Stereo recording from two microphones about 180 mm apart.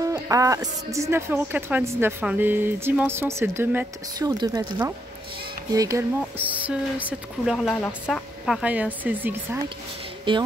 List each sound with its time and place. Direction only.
0.0 s speech: 20° right (ahead or behind)
10.3 s speech: 30° right (ahead or behind)